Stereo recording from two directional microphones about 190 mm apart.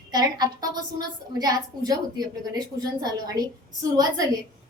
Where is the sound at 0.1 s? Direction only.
20° right (ahead or behind).